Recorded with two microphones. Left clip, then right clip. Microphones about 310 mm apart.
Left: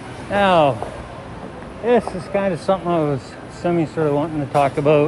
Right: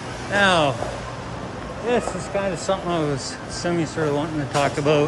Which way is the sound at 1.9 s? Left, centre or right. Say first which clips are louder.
Left 5 dB; centre.